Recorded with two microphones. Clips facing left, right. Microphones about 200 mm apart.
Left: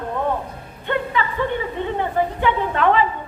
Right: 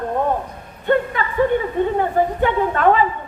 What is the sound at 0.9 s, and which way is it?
A woman's voice, 45° right (ahead or behind).